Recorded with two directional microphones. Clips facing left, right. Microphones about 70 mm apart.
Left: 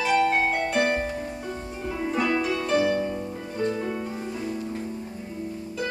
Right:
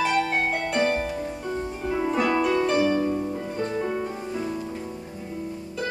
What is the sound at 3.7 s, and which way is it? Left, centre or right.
Music, centre.